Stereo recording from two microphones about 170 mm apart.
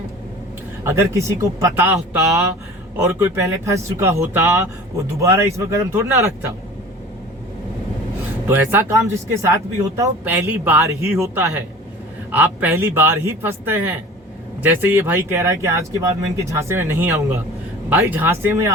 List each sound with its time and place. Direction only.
0.9 s speech: 15° right (ahead or behind)
8.4 s speech: 10° right (ahead or behind)